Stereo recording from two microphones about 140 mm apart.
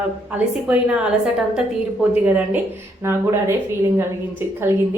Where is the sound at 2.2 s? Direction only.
10° right (ahead or behind).